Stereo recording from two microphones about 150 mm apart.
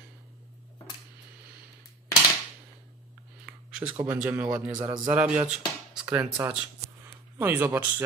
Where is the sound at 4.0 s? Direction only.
10° right (ahead or behind).